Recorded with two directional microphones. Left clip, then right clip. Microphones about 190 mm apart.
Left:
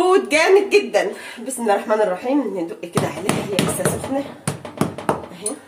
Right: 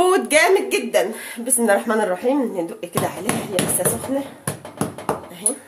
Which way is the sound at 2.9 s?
10° left (ahead or behind).